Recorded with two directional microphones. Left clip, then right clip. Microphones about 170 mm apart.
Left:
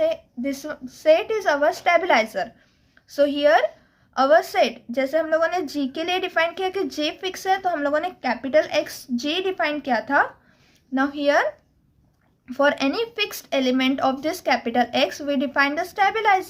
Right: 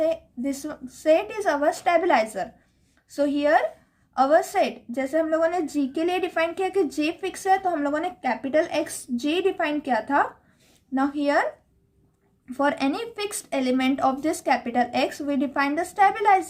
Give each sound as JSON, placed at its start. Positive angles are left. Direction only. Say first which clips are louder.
{"t": 0.0, "sound": "a sound", "louder": "left 2 dB", "side_deg": 20}
{"t": 1.0, "sound": "a woman's voice", "louder": "left 3 dB", "side_deg": 20}
{"t": 12.5, "sound": "a woman's voice", "louder": "left 4 dB", "side_deg": 20}